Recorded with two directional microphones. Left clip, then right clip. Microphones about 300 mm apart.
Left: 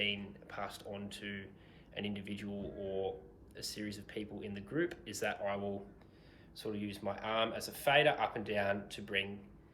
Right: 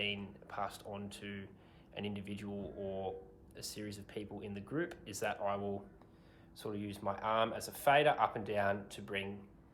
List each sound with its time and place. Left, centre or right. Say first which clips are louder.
0.0 s speech: left 2 dB; centre